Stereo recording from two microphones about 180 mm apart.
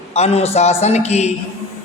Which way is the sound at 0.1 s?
35° left (ahead or behind).